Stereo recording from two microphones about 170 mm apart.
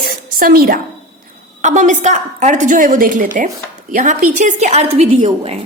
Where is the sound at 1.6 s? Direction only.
45° right (ahead or behind).